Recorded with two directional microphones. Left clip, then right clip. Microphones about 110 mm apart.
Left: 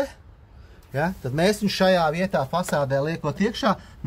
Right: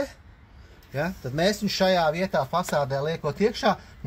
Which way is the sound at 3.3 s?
30° left (ahead or behind).